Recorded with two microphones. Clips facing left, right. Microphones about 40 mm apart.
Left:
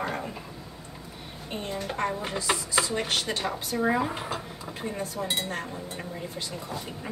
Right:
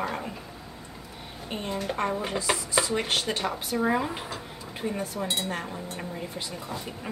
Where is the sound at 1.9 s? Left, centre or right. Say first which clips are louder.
Right 1 dB; centre.